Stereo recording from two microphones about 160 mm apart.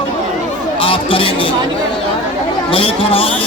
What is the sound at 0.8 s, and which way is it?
Speech, 35° left (ahead or behind).